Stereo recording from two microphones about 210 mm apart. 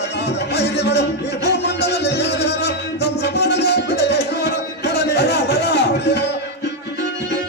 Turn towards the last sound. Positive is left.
turn(degrees=55)  # may be behind; listen again after turning